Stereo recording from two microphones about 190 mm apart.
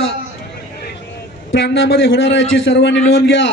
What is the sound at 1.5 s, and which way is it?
A man's voice, 70° left (ahead or behind).